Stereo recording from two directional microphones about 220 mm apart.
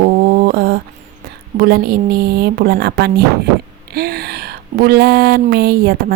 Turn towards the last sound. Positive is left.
turn(degrees=-45)  # may be behind; listen again after turning